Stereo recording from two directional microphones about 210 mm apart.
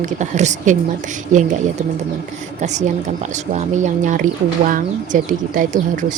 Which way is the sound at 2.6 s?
35° right (ahead or behind).